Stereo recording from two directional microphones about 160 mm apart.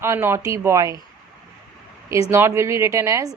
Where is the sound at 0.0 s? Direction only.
15° right (ahead or behind).